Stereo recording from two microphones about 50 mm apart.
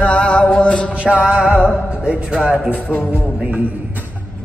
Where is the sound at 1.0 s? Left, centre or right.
Right.